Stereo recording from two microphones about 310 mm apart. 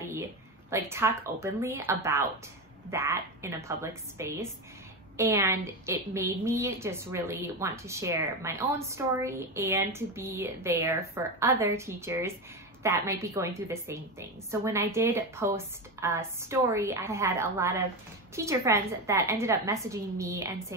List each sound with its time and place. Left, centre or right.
0.1 s a woman's voice: centre